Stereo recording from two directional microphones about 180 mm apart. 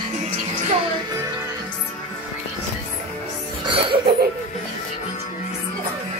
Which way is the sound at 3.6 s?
30° right (ahead or behind).